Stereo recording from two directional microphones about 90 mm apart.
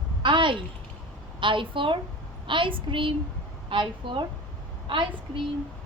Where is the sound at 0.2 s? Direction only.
65° right (ahead or behind).